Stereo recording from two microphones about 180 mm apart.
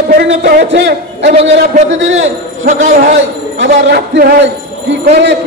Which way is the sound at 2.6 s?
45° right (ahead or behind).